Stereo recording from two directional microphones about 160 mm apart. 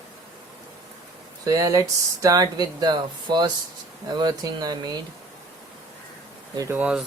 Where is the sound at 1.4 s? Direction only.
20° right (ahead or behind).